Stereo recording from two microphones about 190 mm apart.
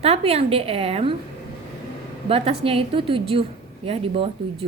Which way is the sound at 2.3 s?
30° right (ahead or behind).